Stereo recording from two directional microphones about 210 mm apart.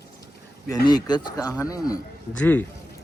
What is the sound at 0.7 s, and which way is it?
Speech, 20° left (ahead or behind).